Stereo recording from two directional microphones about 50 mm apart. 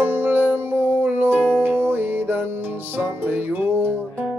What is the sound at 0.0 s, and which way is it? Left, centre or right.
Music, right.